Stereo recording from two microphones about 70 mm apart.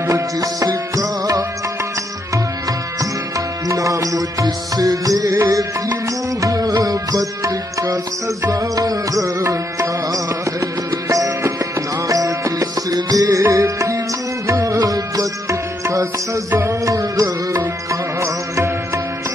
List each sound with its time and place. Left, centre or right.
0.0 s music: right
3.0 s music: right
14.8 s music: right
15.8 s music: right